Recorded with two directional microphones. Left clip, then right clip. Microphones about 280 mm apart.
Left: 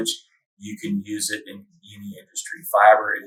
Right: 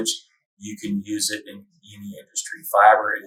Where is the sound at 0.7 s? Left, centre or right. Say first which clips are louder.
Right 1 dB; centre.